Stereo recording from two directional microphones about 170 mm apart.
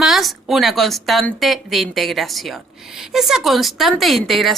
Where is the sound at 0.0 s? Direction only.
Centre (ahead or behind).